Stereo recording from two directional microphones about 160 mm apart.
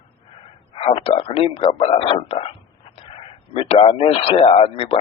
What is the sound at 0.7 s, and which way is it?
Speech, 35° left (ahead or behind).